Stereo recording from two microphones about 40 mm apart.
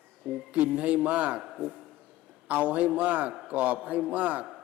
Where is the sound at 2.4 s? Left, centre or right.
Right.